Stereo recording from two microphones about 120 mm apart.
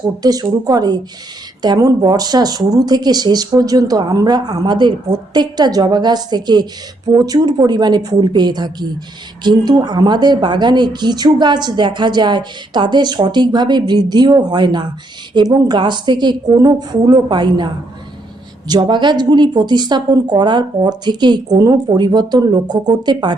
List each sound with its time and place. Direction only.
0.2 s a woman's voice: 30° right (ahead or behind)
18.7 s a woman's voice: 35° right (ahead or behind)